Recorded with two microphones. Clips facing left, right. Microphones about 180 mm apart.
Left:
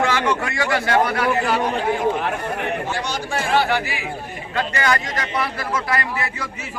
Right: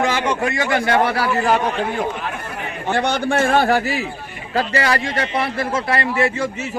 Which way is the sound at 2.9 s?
60° right (ahead or behind).